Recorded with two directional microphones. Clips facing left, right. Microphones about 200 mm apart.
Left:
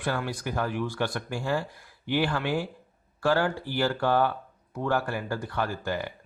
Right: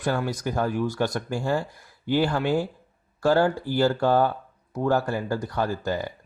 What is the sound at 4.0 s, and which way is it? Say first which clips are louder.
Speech: right 3 dB; 40° right (ahead or behind).